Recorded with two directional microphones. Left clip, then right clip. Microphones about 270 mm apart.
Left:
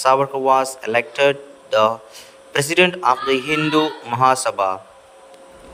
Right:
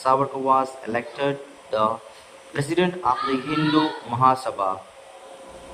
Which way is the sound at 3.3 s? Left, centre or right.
Centre.